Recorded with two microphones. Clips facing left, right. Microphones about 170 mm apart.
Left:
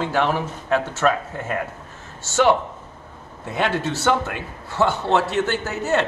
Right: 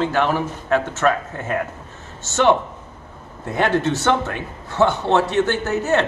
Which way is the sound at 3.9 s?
5° left (ahead or behind).